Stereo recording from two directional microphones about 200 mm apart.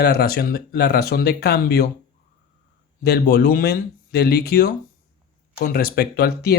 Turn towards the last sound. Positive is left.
turn(degrees=50)  # may be behind; listen again after turning